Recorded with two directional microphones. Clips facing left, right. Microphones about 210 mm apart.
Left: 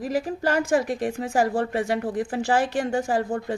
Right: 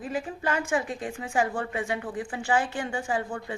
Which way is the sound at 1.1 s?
40° left (ahead or behind).